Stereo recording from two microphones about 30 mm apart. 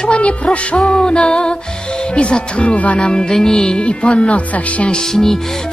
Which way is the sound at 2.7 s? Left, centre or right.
Left.